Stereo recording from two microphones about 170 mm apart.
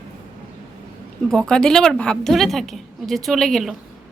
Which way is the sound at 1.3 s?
5° left (ahead or behind).